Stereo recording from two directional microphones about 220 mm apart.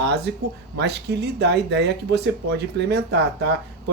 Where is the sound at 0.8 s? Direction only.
50° right (ahead or behind).